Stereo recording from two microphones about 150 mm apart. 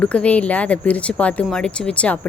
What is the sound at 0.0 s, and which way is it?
Speech, 10° left (ahead or behind).